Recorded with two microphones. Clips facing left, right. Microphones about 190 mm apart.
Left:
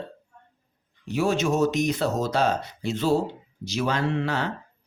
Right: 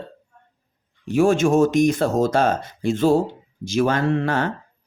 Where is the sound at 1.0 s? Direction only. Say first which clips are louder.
Right 7 dB; 50° right (ahead or behind).